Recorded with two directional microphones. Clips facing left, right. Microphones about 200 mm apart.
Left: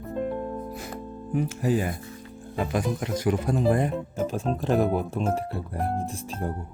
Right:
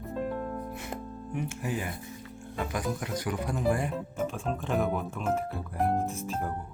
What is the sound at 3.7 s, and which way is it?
Speech, 40° left (ahead or behind).